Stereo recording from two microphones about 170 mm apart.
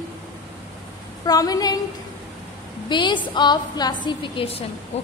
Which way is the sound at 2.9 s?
25° left (ahead or behind).